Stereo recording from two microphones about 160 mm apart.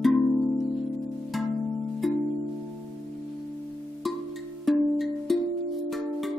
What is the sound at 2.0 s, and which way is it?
Music, centre (ahead or behind).